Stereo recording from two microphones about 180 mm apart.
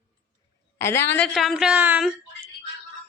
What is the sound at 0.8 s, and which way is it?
Speech, 15° left (ahead or behind).